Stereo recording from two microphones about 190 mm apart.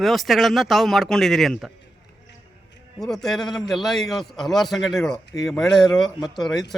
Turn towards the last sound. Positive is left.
turn(degrees=0)  # may be behind; listen again after turning